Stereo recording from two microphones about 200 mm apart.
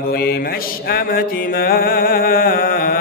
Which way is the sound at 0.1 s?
50° left (ahead or behind).